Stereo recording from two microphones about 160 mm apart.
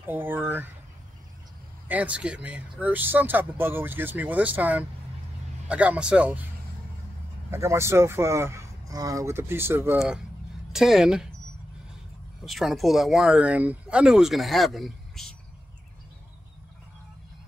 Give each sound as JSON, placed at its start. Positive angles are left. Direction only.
{"t": 0.0, "sound": "speech", "side_deg": -10}
{"t": 1.9, "sound": "speech", "side_deg": -10}
{"t": 7.5, "sound": "speech", "side_deg": -15}
{"t": 12.4, "sound": "speech", "side_deg": 0}